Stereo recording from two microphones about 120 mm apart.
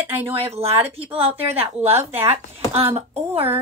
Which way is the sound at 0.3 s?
55° right (ahead or behind).